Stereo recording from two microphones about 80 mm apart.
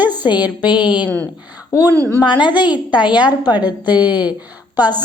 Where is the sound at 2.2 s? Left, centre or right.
Left.